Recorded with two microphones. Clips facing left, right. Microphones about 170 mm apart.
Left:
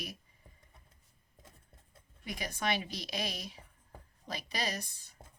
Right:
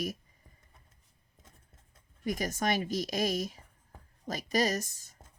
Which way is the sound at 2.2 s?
45° right (ahead or behind).